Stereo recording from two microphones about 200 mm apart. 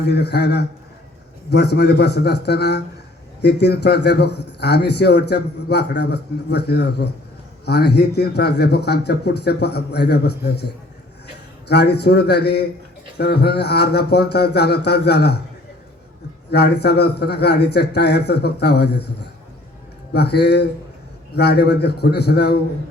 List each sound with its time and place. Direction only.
0.1 s speech: 55° left (ahead or behind)
11.7 s speech: 55° left (ahead or behind)
16.5 s speech: 55° left (ahead or behind)
20.1 s speech: 55° left (ahead or behind)